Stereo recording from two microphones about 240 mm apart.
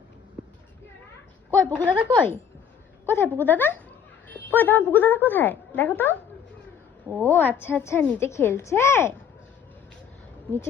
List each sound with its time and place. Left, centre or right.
1.7 s speech: centre
3.1 s speech: centre
7.3 s speech: centre